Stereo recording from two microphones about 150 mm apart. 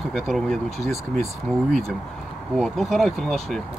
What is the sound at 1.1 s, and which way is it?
Speech, 55° right (ahead or behind).